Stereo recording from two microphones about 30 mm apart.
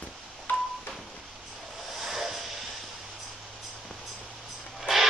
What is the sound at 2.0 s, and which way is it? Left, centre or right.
Vehicle, centre.